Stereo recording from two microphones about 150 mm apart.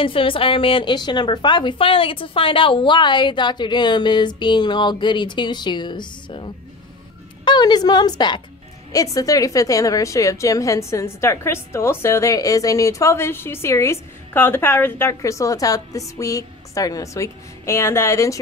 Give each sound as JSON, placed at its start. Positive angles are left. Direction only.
{"t": 0.0, "sound": "a woman's voice", "side_deg": 35}